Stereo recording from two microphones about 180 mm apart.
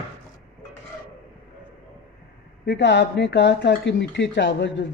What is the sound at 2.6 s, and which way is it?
Speech, 70° left (ahead or behind).